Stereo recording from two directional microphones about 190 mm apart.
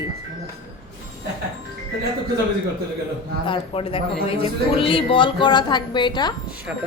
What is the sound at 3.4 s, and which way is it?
Speech, 30° left (ahead or behind).